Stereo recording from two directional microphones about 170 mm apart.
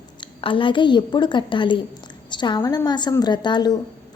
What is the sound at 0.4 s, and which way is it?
A woman's voice, 30° left (ahead or behind).